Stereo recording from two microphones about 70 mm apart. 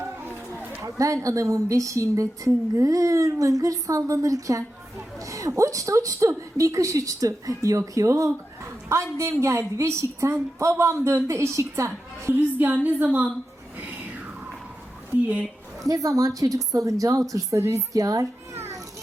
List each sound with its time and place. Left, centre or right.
0.8 s a woman's voice: right
12.4 s a woman's voice: right
13.7 s music: right
15.1 s a woman's voice: right
15.9 s a woman's voice: right